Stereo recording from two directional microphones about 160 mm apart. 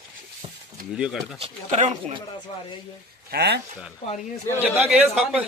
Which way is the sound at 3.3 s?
90° right.